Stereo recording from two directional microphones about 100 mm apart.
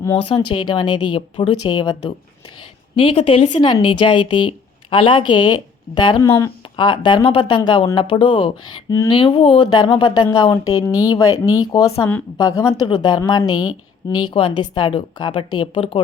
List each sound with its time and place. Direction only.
0.2 s speech: 60° left (ahead or behind)
2.9 s speech: 60° left (ahead or behind); by 6.2 s 45° left (ahead or behind)
6.2 s speech: 25° left (ahead or behind)
6.7 s speech: 55° left (ahead or behind)
7.2 s a woman's voice: 65° left (ahead or behind)
7.4 s a woman's voice: 50° left (ahead or behind)
10.5 s speech: 30° left (ahead or behind)
14.1 s a woman's voice: 55° left (ahead or behind)